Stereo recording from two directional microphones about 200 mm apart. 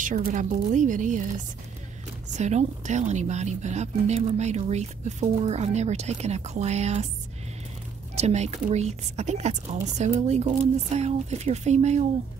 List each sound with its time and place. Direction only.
0.0 s speech: 40° right (ahead or behind)
2.3 s speech: 35° right (ahead or behind)
8.2 s speech: 35° right (ahead or behind)